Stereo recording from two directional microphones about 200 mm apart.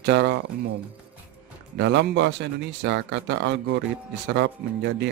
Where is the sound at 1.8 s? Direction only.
60° right (ahead or behind).